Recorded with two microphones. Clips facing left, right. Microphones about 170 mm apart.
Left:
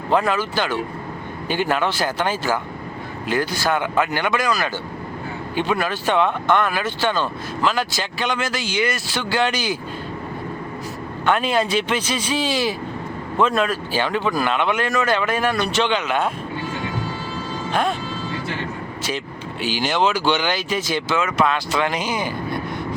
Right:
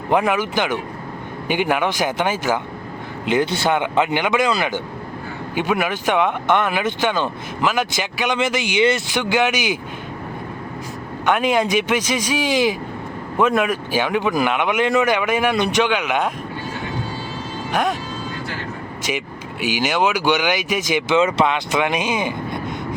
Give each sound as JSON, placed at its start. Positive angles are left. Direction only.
{"t": 0.1, "sound": "speech", "side_deg": -15}
{"t": 11.3, "sound": "speech", "side_deg": -15}
{"t": 17.7, "sound": "speech", "side_deg": -10}
{"t": 19.5, "sound": "speech", "side_deg": -10}
{"t": 21.2, "sound": "speech", "side_deg": -30}
{"t": 21.5, "sound": "speech", "side_deg": -15}